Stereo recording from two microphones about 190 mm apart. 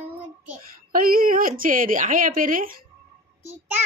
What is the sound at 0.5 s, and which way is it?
A woman's voice, 50° right (ahead or behind).